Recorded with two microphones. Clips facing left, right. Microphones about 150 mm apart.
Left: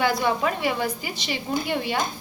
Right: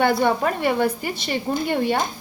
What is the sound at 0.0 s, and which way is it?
A woman's voice, 55° right (ahead or behind).